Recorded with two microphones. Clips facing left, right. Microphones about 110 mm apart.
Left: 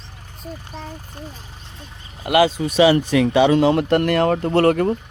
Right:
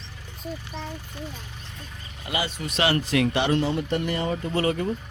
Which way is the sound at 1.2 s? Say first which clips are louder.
Even; 40° left (ahead or behind).